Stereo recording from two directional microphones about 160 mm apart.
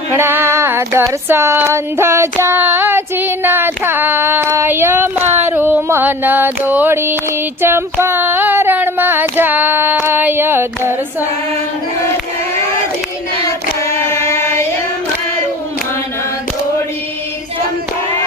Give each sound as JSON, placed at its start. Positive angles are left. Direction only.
{"t": 0.1, "sound": "female singing", "side_deg": -15}
{"t": 14.1, "sound": "chant", "side_deg": 15}